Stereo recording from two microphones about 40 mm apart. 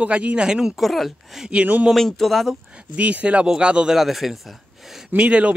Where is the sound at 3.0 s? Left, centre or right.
Right.